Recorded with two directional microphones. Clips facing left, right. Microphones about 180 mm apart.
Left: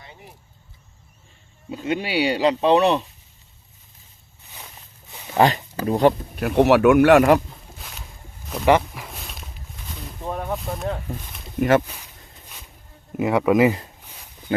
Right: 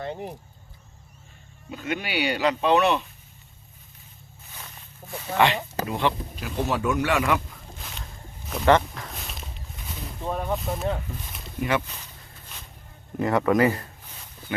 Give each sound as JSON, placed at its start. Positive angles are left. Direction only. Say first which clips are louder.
{"t": 0.0, "sound": "keys jangling", "louder": "right 14 dB", "side_deg": -60}
{"t": 1.7, "sound": "speech", "louder": "left 5 dB", "side_deg": 30}
{"t": 5.4, "sound": "speech", "louder": "left 4 dB", "side_deg": 40}
{"t": 6.3, "sound": "speech", "louder": "left 11 dB", "side_deg": 65}
{"t": 7.0, "sound": "speech", "louder": "left 10 dB", "side_deg": 50}
{"t": 7.8, "sound": "a sound", "louder": "right 3 dB", "side_deg": 0}
{"t": 10.2, "sound": "speech", "louder": "even", "side_deg": 0}
{"t": 13.1, "sound": "speech", "louder": "left 3 dB", "side_deg": 10}